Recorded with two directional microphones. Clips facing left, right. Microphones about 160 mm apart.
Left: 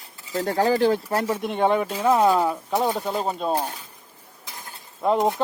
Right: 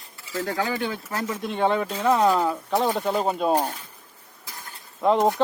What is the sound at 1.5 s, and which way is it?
Speech, 15° left (ahead or behind).